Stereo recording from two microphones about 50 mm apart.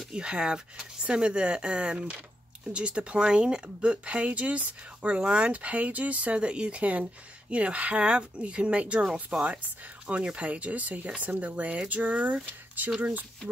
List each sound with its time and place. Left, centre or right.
0.1 s speech: centre